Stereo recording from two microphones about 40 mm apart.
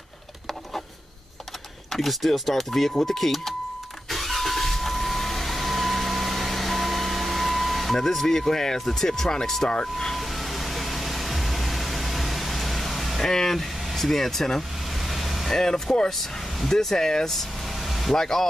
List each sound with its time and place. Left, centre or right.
1.9 s speech: centre
4.1 s vehicle: centre
9.7 s speech: centre
10.1 s vehicle: centre
13.2 s speech: centre
15.0 s vehicle: centre
15.5 s speech: centre
18.1 s speech: centre